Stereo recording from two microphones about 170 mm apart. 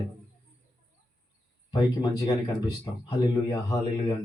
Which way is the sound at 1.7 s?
20° left (ahead or behind).